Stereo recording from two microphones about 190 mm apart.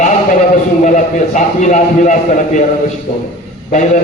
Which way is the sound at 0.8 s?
40° left (ahead or behind).